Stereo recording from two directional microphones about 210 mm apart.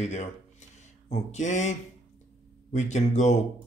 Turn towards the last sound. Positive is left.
turn(degrees=35)  # may be behind; listen again after turning